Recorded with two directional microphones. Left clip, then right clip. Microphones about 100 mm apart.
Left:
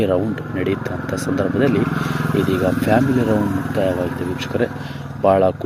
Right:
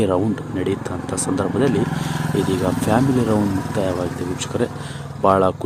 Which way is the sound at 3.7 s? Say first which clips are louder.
Left 5 dB; 25° right (ahead or behind).